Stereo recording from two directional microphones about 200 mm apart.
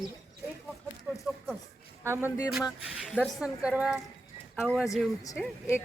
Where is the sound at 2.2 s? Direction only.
15° left (ahead or behind).